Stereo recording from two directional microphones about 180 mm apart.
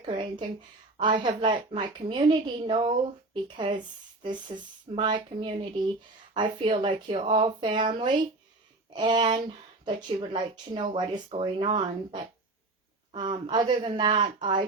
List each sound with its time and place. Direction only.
0.0 s speech: 30° right (ahead or behind)
4.2 s speech: 25° right (ahead or behind)